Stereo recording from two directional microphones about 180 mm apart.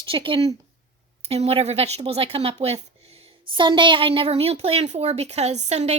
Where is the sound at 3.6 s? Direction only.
25° right (ahead or behind).